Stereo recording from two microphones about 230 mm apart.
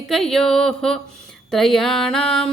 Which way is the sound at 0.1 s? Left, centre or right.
Centre.